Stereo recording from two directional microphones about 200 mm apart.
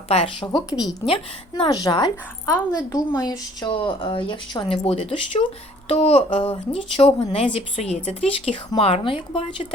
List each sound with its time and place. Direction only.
0.1 s speech: 25° left (ahead or behind)